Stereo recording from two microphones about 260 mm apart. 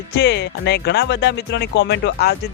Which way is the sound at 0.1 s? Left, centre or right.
Left.